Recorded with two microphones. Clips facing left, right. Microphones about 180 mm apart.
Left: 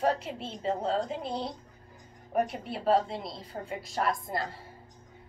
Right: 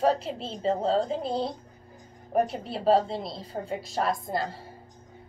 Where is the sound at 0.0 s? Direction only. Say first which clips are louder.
Right 4 dB; 30° right (ahead or behind).